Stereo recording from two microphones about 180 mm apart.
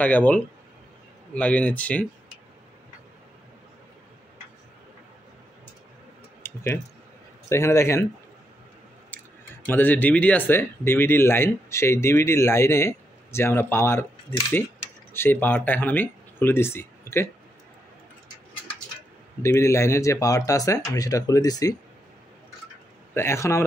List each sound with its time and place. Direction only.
0.0 s speech: 10° left (ahead or behind)
6.4 s clicking: 15° left (ahead or behind)
7.4 s speech: 15° left (ahead or behind)
9.7 s speech: 10° left (ahead or behind)
19.4 s speech: 15° left (ahead or behind)
23.1 s speech: 15° left (ahead or behind)